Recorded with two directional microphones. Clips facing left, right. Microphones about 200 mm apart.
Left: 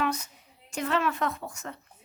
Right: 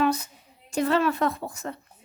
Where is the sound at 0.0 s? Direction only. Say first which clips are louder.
Right 6 dB; 30° right (ahead or behind).